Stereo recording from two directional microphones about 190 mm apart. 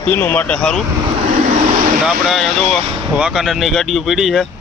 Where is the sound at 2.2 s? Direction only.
Centre (ahead or behind).